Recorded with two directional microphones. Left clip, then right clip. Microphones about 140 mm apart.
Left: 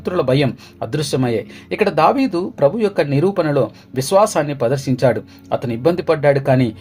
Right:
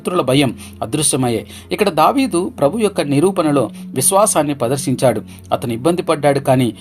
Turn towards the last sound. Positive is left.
turn(degrees=-45)  # may be behind; listen again after turning